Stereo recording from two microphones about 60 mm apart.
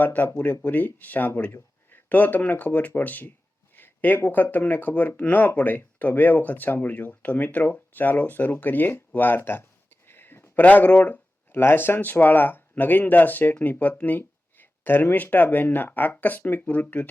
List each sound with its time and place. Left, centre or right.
0.0 s speech: left
10.1 s a sound: left
10.6 s speech: left